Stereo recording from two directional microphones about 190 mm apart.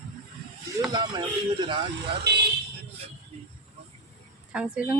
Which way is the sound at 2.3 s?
60° right (ahead or behind).